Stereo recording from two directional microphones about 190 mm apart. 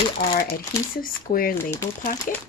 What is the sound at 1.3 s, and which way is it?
Speech, 50° left (ahead or behind).